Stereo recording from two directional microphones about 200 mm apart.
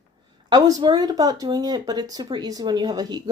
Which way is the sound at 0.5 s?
20° right (ahead or behind).